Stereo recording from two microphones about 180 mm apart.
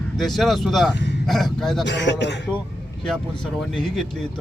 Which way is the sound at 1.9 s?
75° left (ahead or behind).